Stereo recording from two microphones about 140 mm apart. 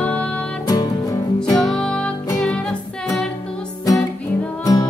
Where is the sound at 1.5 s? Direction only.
Centre (ahead or behind).